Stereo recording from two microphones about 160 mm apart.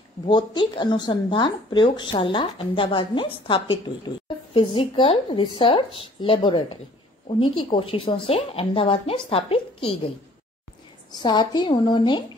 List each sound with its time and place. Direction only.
0.3 s a woman's voice: 30° left (ahead or behind)